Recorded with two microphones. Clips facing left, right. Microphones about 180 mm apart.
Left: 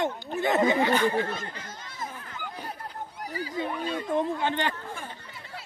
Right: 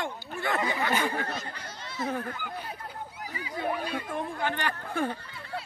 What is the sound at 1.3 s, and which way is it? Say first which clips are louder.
Speech: left 1 dB; 50° left (ahead or behind).